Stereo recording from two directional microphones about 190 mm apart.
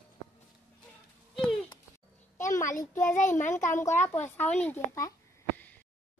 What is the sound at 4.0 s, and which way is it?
Speech, 10° left (ahead or behind).